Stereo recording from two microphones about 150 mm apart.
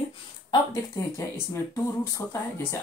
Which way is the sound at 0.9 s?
20° left (ahead or behind).